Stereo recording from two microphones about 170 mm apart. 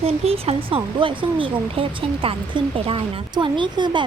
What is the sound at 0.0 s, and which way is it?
Speech, 35° right (ahead or behind).